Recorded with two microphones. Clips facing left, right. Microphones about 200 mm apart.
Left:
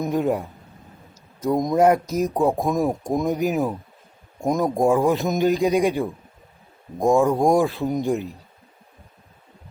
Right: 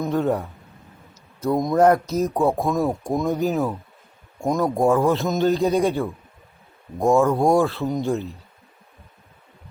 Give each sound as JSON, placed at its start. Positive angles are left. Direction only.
{"t": 0.0, "sound": "speech", "side_deg": 15}